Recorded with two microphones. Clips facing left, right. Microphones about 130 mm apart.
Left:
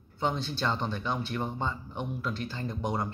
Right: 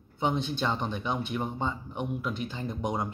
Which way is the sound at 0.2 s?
15° right (ahead or behind).